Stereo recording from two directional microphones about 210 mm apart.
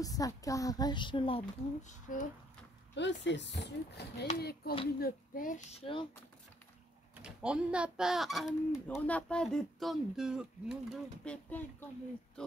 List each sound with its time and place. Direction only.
0.0 s a woman's voice: 15° left (ahead or behind)
1.4 s speech: 35° left (ahead or behind)
2.9 s speech: 55° left (ahead or behind); by 5.9 s 40° left (ahead or behind)
7.2 s a child's voice: 5° right (ahead or behind)